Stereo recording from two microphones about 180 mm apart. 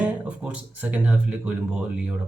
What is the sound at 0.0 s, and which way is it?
Speech, 5° right (ahead or behind).